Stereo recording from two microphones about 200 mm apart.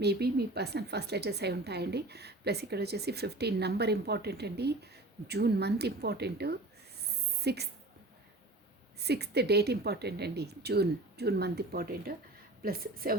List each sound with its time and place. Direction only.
0.0 s a woman's voice: 55° right (ahead or behind)
9.0 s speech: 55° right (ahead or behind)